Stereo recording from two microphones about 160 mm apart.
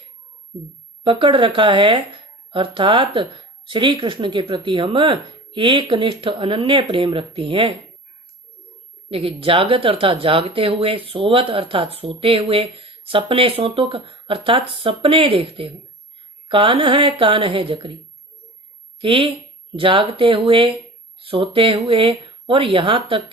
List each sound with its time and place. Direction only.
1.0 s speech: 30° right (ahead or behind)
9.0 s speech: 35° right (ahead or behind)
18.9 s speech: 30° right (ahead or behind)